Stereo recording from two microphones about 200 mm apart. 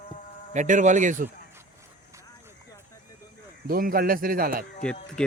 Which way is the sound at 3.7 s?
45° right (ahead or behind).